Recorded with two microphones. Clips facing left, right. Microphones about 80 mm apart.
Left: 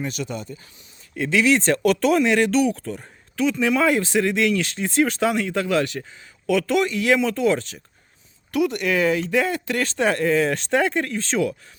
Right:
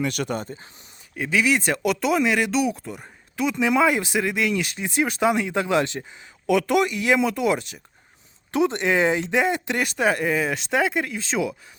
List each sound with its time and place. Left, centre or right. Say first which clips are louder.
0.0 s speech: right 3 dB; right
1.1 s speech: left 3 dB; centre